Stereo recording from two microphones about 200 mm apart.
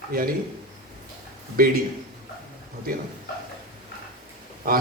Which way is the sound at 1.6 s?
45° right (ahead or behind).